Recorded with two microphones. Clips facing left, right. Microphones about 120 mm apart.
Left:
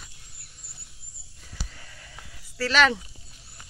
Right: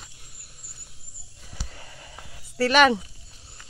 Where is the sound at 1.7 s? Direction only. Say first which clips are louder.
Right 4 dB; 30° right (ahead or behind).